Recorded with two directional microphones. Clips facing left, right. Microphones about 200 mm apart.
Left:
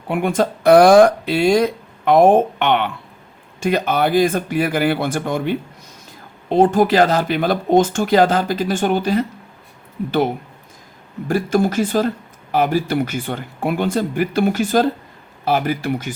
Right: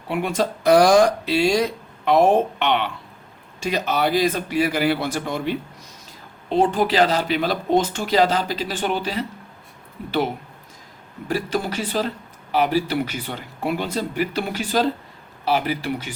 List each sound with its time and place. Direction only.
0.1 s speech: 50° left (ahead or behind)
11.3 s speech: 50° left (ahead or behind)